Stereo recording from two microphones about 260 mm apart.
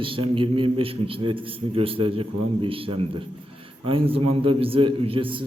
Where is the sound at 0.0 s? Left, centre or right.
Centre.